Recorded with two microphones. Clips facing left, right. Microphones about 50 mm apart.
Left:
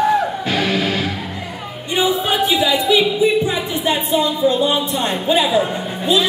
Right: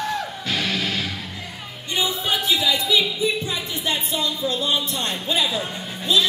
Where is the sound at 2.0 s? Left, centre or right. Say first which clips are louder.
Left 7 dB; centre.